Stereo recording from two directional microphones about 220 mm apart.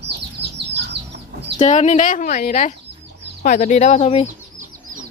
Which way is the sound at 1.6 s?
30° left (ahead or behind).